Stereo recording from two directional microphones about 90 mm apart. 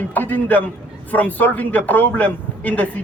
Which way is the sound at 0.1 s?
20° left (ahead or behind).